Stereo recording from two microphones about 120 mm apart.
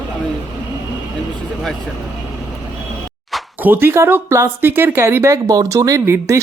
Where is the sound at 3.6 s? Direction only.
15° right (ahead or behind).